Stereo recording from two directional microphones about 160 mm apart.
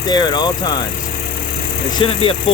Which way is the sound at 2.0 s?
35° left (ahead or behind).